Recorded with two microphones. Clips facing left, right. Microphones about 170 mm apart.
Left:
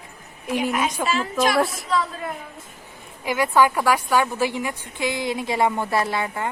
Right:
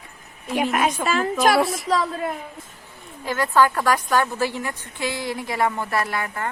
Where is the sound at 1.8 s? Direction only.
40° right (ahead or behind).